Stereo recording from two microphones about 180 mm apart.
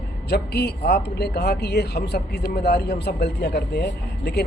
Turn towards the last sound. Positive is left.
turn(degrees=65)  # may be behind; listen again after turning